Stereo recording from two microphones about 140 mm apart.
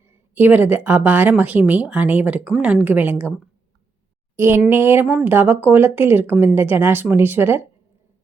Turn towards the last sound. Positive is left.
turn(degrees=-15)  # may be behind; listen again after turning